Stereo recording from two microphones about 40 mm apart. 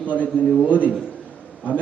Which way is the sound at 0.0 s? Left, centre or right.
Left.